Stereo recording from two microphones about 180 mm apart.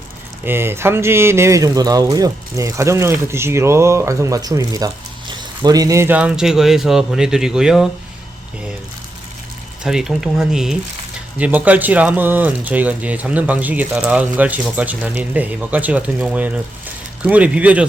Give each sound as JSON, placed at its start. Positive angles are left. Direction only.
{"t": 0.4, "sound": "speech", "side_deg": -10}
{"t": 9.8, "sound": "speech", "side_deg": -5}